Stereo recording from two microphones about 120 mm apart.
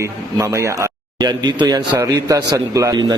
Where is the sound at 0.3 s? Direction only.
25° right (ahead or behind).